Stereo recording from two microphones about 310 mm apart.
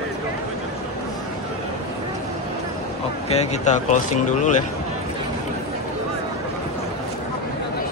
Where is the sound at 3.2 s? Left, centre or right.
Left.